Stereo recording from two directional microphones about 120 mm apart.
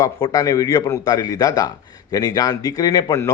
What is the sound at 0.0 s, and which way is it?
A man's voice, 30° left (ahead or behind).